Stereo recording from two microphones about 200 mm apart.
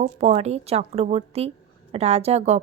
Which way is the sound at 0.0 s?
35° right (ahead or behind).